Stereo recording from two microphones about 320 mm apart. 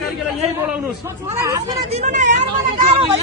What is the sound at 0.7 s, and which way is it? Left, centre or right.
A man's voice, centre.